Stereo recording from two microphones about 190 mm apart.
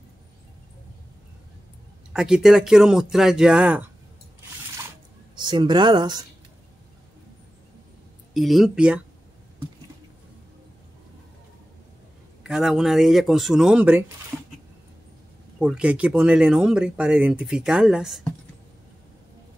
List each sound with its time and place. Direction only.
2.1 s speech: 5° right (ahead or behind)
5.3 s speech: 25° right (ahead or behind)
8.3 s speech: centre (ahead or behind)
12.4 s speech: 5° right (ahead or behind)
15.6 s speech: 5° right (ahead or behind)